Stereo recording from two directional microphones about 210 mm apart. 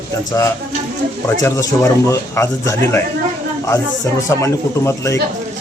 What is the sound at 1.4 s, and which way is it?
A man's voice, 15° left (ahead or behind).